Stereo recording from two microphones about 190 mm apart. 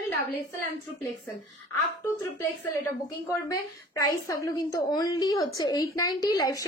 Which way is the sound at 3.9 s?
15° left (ahead or behind).